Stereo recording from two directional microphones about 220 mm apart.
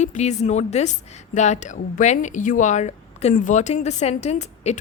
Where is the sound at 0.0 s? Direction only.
30° left (ahead or behind).